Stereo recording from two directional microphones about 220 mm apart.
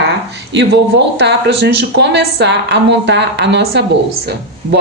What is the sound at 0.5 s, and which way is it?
Speech, 50° right (ahead or behind).